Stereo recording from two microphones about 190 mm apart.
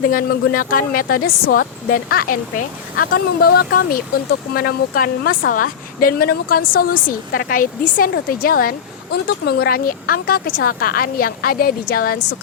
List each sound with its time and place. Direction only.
0.1 s speech: 50° left (ahead or behind)